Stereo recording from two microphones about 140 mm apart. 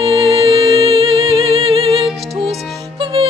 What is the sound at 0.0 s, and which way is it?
Music, 40° right (ahead or behind).